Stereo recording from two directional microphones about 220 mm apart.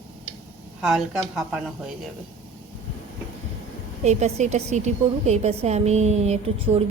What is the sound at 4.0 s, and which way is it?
A woman's voice, 30° right (ahead or behind).